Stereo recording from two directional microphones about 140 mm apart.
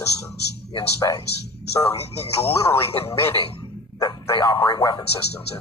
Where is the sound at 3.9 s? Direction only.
25° left (ahead or behind).